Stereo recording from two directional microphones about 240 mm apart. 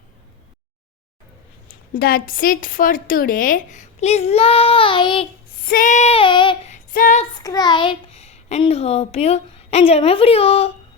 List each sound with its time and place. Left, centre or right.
1.6 s a woman's voice: left
5.6 s child singing: left
6.7 s a sound: left
7.3 s a child's voice: centre